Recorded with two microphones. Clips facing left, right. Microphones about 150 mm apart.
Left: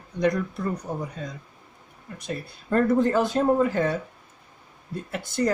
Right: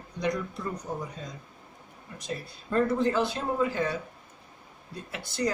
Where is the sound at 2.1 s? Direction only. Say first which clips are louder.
Left 3 dB; 60° left (ahead or behind).